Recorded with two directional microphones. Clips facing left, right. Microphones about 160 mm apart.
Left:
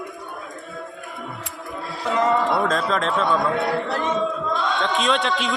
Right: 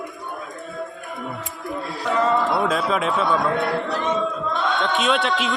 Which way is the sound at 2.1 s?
15° left (ahead or behind).